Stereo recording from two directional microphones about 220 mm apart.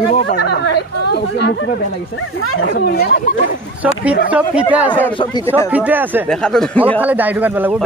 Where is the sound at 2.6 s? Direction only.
45° left (ahead or behind).